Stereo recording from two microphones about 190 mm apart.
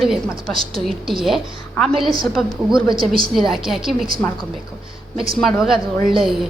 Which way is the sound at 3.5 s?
Centre (ahead or behind).